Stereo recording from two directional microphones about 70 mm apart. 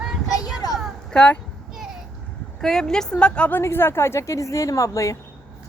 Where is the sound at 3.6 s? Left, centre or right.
Left.